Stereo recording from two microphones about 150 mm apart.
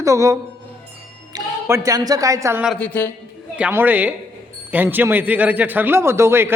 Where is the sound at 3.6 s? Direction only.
15° right (ahead or behind).